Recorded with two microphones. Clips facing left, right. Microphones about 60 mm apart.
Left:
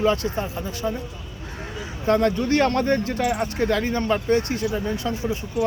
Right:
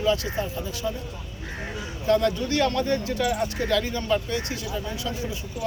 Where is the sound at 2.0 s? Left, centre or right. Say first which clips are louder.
Left 2 dB; left.